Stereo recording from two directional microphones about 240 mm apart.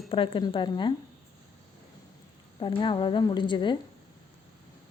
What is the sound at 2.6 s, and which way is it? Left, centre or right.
A woman's voice, left.